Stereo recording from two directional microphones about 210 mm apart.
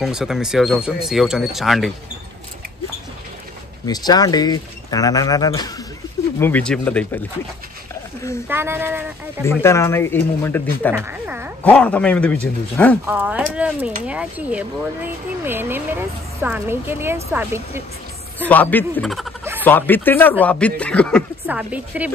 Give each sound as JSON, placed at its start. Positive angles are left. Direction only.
{"t": 0.0, "sound": "speech", "side_deg": 0}
{"t": 3.8, "sound": "speech", "side_deg": 20}
{"t": 6.4, "sound": "speech", "side_deg": 5}
{"t": 8.5, "sound": "a woman's voice", "side_deg": -10}
{"t": 9.4, "sound": "speech", "side_deg": 10}
{"t": 10.9, "sound": "a woman's voice", "side_deg": -10}
{"t": 11.6, "sound": "speech", "side_deg": 5}
{"t": 13.0, "sound": "a woman's voice", "side_deg": -10}
{"t": 18.5, "sound": "speech", "side_deg": 10}
{"t": 21.5, "sound": "a woman's voice", "side_deg": -5}